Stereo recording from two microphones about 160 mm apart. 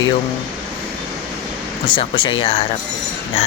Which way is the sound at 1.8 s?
35° left (ahead or behind).